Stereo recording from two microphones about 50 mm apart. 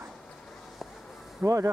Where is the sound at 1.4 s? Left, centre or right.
Right.